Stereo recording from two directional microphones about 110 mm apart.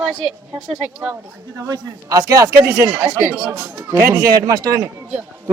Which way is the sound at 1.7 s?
35° right (ahead or behind).